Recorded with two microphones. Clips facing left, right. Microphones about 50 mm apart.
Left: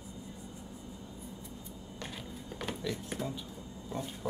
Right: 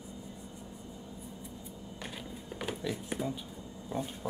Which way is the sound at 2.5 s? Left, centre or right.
Centre.